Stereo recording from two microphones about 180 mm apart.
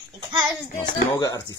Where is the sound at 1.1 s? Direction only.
20° left (ahead or behind).